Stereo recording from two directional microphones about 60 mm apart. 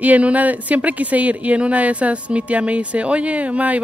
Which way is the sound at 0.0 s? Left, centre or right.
Right.